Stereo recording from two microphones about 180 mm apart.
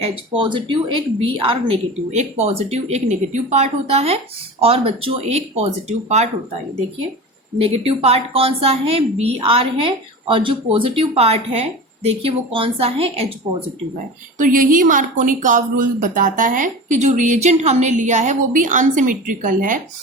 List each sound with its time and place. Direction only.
0.0 s a woman's voice: 25° right (ahead or behind)
7.6 s a woman's voice: 35° right (ahead or behind)
14.3 s a woman's voice: 50° right (ahead or behind)